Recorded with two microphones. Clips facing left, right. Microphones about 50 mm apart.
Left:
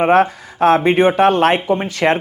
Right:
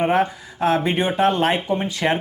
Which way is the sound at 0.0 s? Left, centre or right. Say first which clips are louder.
Left 6 dB; left.